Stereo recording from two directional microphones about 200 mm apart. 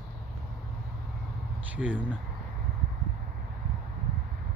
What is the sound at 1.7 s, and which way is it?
Speech, 5° right (ahead or behind).